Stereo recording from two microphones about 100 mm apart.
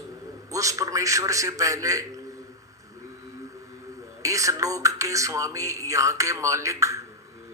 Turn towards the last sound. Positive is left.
turn(degrees=-30)  # may be behind; listen again after turning